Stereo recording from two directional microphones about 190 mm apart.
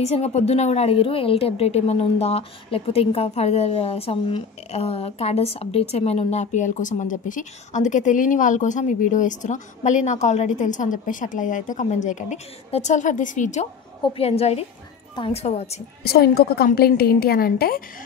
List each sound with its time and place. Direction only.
0.0 s a woman's voice: 35° left (ahead or behind)
16.0 s a woman's voice: 55° left (ahead or behind)